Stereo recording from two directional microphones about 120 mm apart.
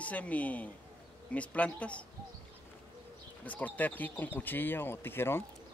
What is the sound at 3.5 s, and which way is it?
Speech, 15° left (ahead or behind).